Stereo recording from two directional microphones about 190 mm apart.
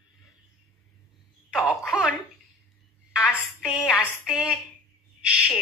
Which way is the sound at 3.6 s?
5° right (ahead or behind).